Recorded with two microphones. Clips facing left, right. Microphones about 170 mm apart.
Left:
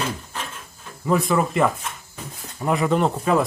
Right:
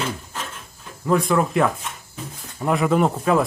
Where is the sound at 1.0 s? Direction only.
Centre (ahead or behind).